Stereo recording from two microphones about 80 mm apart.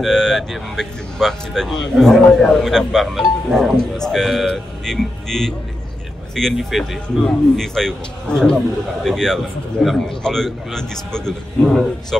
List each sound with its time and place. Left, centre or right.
0.0 s speech: centre